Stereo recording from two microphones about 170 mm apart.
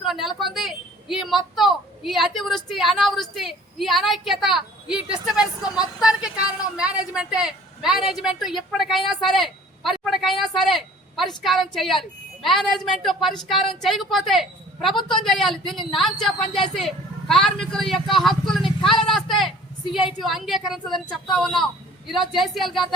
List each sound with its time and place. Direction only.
0.0 s speech: centre (ahead or behind)
0.5 s vehicle: centre (ahead or behind)
1.5 s a woman's voice: centre (ahead or behind)
14.9 s a woman's voice: 25° left (ahead or behind)
15.2 s a woman's voice: centre (ahead or behind)